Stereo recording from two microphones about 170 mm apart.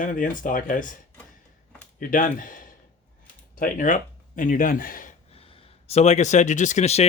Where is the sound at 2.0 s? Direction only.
50° left (ahead or behind).